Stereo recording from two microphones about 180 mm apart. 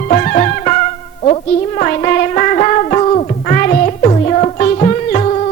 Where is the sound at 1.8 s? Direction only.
40° left (ahead or behind).